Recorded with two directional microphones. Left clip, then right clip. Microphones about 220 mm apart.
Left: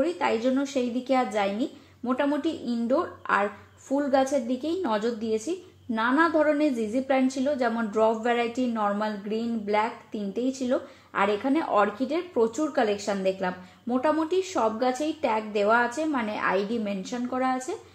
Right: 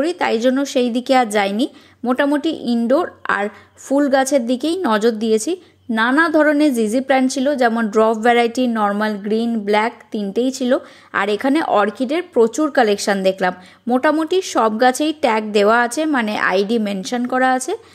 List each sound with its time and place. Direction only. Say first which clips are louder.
0.0 s a woman's voice: right 8 dB; 40° right (ahead or behind)